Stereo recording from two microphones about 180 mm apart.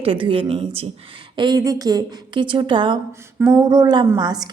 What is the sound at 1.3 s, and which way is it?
A woman's voice, 25° right (ahead or behind).